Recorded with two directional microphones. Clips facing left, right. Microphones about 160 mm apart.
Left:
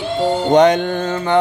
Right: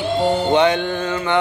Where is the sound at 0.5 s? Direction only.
40° left (ahead or behind).